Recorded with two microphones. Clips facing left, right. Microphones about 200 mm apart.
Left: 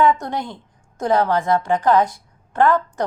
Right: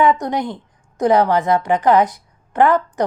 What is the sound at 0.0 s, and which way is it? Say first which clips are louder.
A woman's voice: right 2 dB; 20° right (ahead or behind).